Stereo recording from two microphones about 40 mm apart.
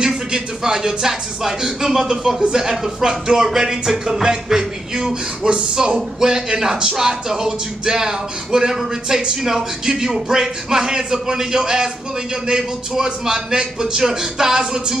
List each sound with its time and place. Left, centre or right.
0.0 s speech: centre